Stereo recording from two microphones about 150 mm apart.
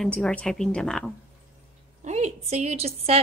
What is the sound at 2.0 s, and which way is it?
A woman's voice, 50° right (ahead or behind).